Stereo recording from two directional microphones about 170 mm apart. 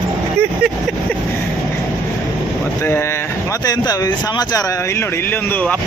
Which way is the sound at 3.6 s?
25° left (ahead or behind).